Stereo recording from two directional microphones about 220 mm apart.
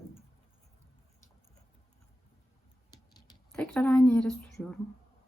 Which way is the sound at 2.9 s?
20° left (ahead or behind).